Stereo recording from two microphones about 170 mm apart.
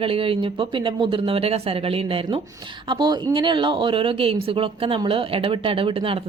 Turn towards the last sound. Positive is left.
turn(degrees=-30)  # may be behind; listen again after turning